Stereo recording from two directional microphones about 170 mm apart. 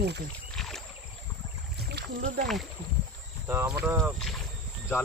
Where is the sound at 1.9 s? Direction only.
75° right (ahead or behind).